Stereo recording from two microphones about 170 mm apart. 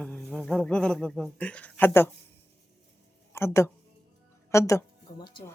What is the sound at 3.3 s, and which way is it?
Speech, 15° left (ahead or behind).